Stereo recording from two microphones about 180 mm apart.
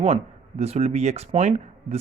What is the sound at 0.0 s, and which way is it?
Speech, 35° right (ahead or behind).